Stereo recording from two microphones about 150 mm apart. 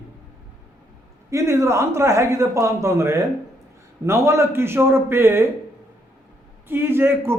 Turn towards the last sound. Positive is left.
turn(degrees=-15)  # may be behind; listen again after turning